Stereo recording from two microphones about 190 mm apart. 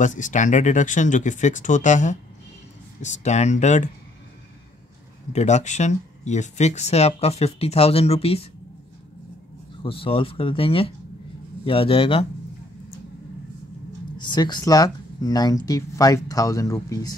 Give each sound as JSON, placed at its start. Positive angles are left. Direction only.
{"t": 0.0, "sound": "speech", "side_deg": 40}
{"t": 5.3, "sound": "speech", "side_deg": 35}
{"t": 9.8, "sound": "speech", "side_deg": 30}
{"t": 14.1, "sound": "speech", "side_deg": 25}